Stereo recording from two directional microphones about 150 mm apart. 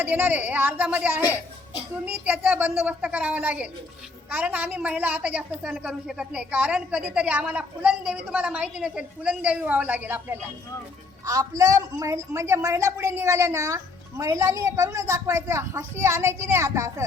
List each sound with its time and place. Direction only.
0.0 s a woman's voice: 10° right (ahead or behind)